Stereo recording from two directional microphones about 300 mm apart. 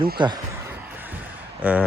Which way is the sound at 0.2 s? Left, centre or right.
Centre.